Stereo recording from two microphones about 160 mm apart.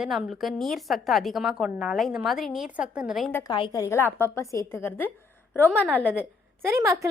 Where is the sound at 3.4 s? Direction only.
30° left (ahead or behind); by 5.7 s 10° left (ahead or behind).